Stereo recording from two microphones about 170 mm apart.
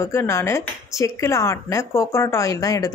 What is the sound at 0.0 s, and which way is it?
A woman's voice, 15° left (ahead or behind).